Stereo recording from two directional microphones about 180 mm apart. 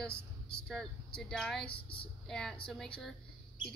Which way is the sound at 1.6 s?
30° left (ahead or behind).